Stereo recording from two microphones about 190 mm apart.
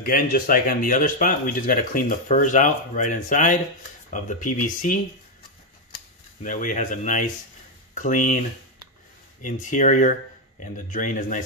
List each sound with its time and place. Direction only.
0.0 s speech: 50° left (ahead or behind)
6.4 s speech: 45° left (ahead or behind)